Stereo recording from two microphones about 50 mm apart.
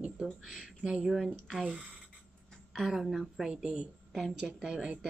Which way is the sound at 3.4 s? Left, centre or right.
Centre.